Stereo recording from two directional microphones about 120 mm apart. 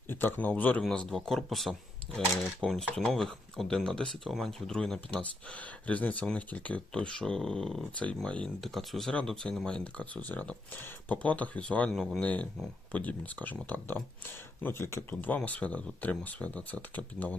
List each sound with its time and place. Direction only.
0.1 s speech: 15° left (ahead or behind)